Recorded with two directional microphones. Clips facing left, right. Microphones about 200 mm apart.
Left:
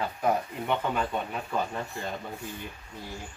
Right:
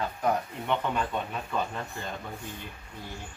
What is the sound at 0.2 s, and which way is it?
Speech, 5° left (ahead or behind).